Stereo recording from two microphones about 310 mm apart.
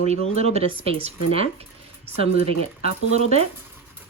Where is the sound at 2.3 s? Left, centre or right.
Left.